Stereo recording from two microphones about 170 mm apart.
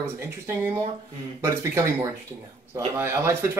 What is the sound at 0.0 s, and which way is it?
Speech, 15° right (ahead or behind).